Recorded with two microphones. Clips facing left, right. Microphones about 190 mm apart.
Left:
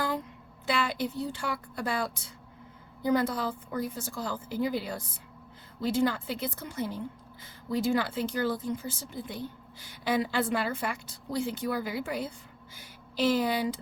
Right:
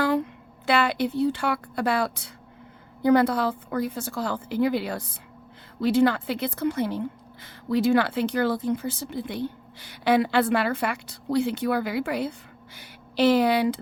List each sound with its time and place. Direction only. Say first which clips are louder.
0.0 s a woman's voice: right 8 dB; 65° right (ahead or behind)